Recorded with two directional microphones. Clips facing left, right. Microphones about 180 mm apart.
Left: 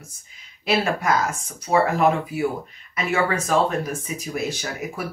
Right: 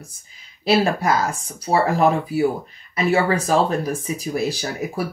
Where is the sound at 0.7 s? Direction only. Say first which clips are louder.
Right 3 dB; 35° right (ahead or behind).